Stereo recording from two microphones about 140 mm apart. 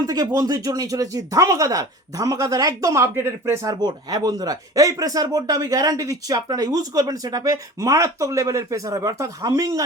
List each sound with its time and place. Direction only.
0.0 s speech: 25° right (ahead or behind)